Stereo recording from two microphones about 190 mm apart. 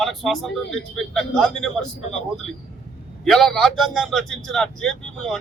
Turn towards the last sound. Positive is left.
turn(degrees=0)  # may be behind; listen again after turning